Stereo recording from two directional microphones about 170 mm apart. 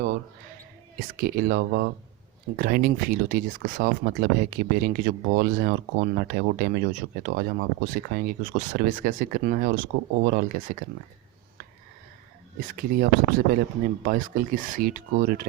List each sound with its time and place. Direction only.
0.9 s speech: 60° right (ahead or behind)
12.5 s speech: 55° right (ahead or behind)